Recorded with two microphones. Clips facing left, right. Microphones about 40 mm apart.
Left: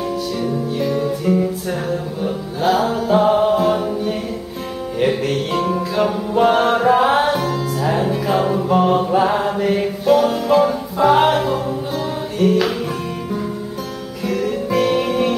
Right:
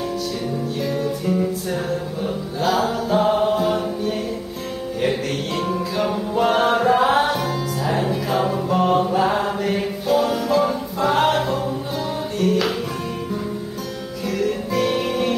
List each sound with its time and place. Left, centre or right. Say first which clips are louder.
0.5 s music: left 5 dB; centre
9.1 s mantra: left 3 dB; centre
10.0 s music: left 5 dB; centre
14.2 s music: left 2 dB; centre